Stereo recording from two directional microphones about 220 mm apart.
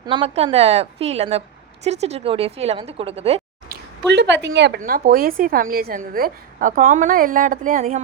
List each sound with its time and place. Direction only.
0.0 s speech: 20° right (ahead or behind)
4.1 s a woman's voice: 50° right (ahead or behind)
4.8 s a woman's voice: 40° right (ahead or behind)